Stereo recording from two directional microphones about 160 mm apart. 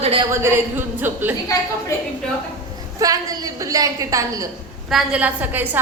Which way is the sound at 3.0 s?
20° right (ahead or behind).